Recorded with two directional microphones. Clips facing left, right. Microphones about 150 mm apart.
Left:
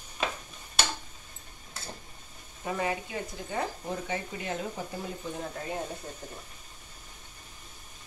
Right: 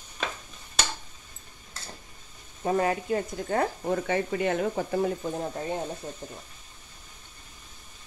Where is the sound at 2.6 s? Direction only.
45° right (ahead or behind); by 5.1 s 65° right (ahead or behind).